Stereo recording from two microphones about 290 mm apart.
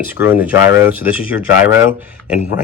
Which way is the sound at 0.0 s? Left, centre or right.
Centre.